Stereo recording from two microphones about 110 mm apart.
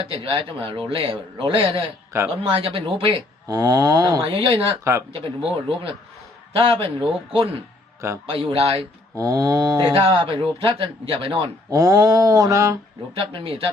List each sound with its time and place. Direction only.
0.0 s speech: 60° right (ahead or behind)
3.4 s mantra: 35° right (ahead or behind)
4.2 s speech: 60° right (ahead or behind)
4.8 s speech: 25° right (ahead or behind)
6.5 s speech: 55° right (ahead or behind)
9.1 s mantra: 30° right (ahead or behind)
10.0 s speech: 55° right (ahead or behind)
11.7 s mantra: 35° right (ahead or behind)
13.1 s speech: 55° right (ahead or behind)